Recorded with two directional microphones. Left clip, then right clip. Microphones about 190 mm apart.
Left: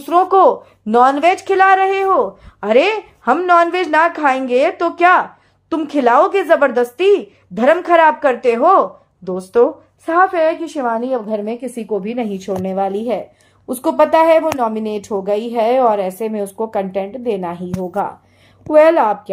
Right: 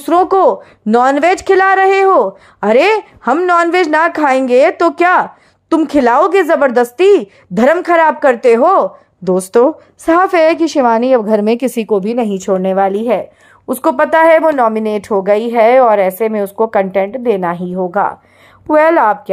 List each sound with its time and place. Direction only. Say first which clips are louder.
0.0 s speech: right 1 dB; 40° right (ahead or behind); by 10.9 s 70° right (ahead or behind)
10.9 s a woman's voice: right 6 dB; 45° right (ahead or behind); by 17.6 s 20° right (ahead or behind)
18.7 s a woman's voice: right 1 dB; 20° right (ahead or behind)